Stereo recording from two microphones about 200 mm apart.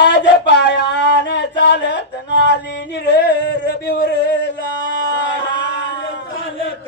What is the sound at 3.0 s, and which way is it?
Singing, 55° left (ahead or behind).